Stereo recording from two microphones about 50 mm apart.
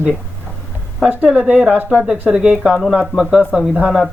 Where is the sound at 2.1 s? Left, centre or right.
Centre.